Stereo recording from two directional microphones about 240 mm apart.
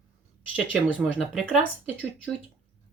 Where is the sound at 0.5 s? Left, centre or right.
Centre.